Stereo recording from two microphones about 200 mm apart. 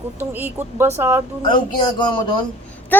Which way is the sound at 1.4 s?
25° left (ahead or behind).